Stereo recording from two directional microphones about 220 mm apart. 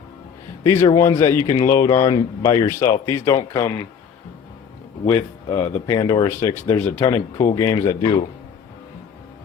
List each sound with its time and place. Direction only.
0.6 s speech: 15° left (ahead or behind)
5.5 s speech: 20° left (ahead or behind)